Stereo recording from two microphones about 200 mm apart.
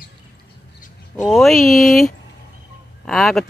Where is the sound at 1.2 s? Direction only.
Centre (ahead or behind).